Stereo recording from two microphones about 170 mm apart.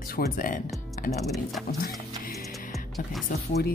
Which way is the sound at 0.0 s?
55° left (ahead or behind).